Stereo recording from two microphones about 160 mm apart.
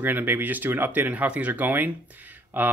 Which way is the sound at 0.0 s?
10° right (ahead or behind).